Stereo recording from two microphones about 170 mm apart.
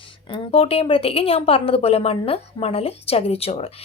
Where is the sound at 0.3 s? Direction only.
30° left (ahead or behind).